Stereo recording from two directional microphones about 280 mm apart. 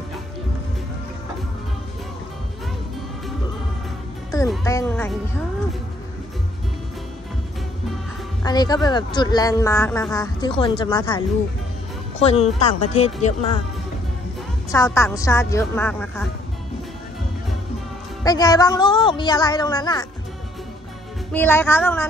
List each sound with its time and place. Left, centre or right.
4.6 s music: centre
8.5 s speech: centre
14.9 s speech: centre
18.2 s speech: centre
21.3 s speech: centre